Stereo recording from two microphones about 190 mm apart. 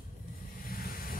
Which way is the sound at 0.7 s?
50° left (ahead or behind).